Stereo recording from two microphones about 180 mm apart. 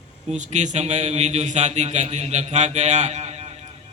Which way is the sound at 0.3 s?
40° right (ahead or behind).